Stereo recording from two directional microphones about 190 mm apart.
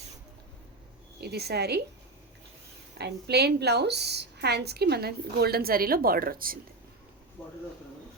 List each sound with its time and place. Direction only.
1.2 s a woman's voice: 60° right (ahead or behind)
3.0 s a woman's voice: 60° right (ahead or behind)